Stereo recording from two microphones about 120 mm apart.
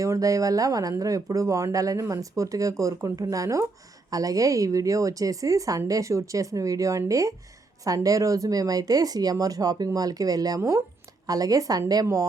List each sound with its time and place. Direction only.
0.0 s speech: 25° right (ahead or behind)